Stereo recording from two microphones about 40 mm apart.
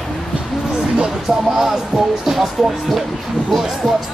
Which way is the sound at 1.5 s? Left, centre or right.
Centre.